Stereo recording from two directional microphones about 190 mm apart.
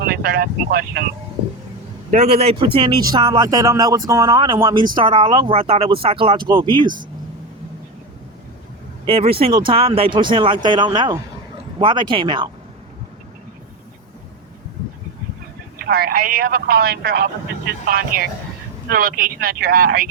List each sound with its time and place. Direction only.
0.0 s speech: 55° right (ahead or behind)
2.0 s a man's voice: 35° right (ahead or behind)
6.8 s speech: 45° right (ahead or behind)
9.0 s a man's voice: 30° right (ahead or behind)
15.9 s speech: 55° right (ahead or behind)